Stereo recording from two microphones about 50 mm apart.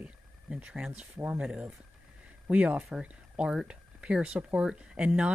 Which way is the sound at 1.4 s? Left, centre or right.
Centre.